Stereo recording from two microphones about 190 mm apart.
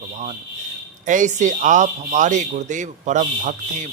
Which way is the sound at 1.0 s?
40° right (ahead or behind).